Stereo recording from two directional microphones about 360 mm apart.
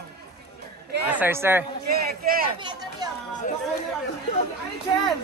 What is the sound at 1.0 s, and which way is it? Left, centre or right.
Speech, centre.